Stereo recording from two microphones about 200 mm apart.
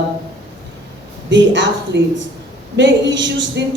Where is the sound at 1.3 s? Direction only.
65° right (ahead or behind).